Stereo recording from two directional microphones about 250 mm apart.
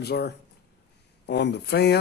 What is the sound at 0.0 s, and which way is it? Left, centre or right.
Speech, left.